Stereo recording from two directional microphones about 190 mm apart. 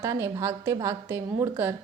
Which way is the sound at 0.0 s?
15° right (ahead or behind).